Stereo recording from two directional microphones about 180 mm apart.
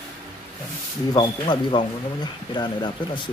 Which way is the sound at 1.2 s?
25° left (ahead or behind).